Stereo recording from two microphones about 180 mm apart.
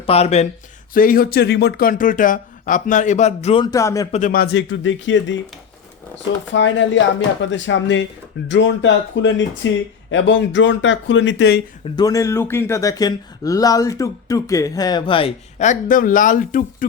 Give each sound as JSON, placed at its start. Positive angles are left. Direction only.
{"t": 0.0, "sound": "speech", "side_deg": 35}
{"t": 0.9, "sound": "speech", "side_deg": 50}
{"t": 3.7, "sound": "speech", "side_deg": 20}
{"t": 4.1, "sound": "speech", "side_deg": 50}
{"t": 4.5, "sound": "speech", "side_deg": 90}
{"t": 11.9, "sound": "speech", "side_deg": 20}